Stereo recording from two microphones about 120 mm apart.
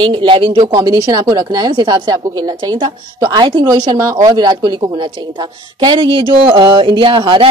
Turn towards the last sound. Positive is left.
turn(degrees=-40)  # may be behind; listen again after turning